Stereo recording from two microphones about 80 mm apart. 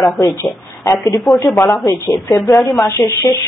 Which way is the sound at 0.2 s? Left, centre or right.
Left.